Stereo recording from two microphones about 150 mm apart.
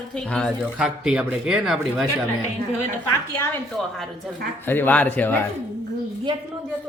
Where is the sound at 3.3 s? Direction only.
15° left (ahead or behind).